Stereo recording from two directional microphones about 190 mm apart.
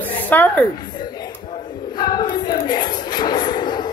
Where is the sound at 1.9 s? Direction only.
20° left (ahead or behind).